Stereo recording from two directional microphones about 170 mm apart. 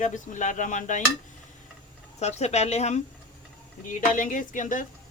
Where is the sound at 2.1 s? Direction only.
40° left (ahead or behind).